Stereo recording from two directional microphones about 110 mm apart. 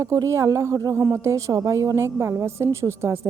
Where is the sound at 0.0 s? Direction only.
30° right (ahead or behind).